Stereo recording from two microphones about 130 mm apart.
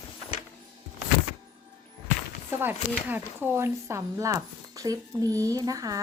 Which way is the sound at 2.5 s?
15° right (ahead or behind).